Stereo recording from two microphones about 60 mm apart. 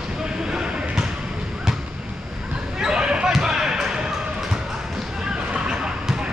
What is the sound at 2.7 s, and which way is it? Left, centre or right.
Basketball bounce, centre.